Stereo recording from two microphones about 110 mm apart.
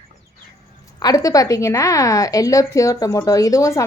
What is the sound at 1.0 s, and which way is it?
A woman's voice, 30° left (ahead or behind).